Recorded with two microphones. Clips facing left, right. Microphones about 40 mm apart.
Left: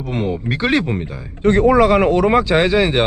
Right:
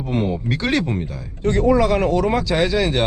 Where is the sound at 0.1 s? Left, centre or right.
Centre.